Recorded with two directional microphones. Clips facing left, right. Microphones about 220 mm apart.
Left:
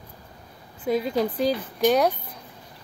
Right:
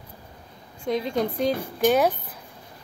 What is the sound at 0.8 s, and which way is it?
Speech, 5° left (ahead or behind).